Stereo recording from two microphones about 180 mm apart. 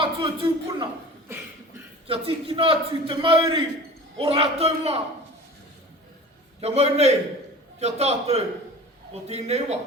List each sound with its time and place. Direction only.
0.0 s a man's voice: 30° right (ahead or behind)
2.0 s a man's voice: 30° right (ahead or behind)
6.6 s a man's voice: 35° right (ahead or behind)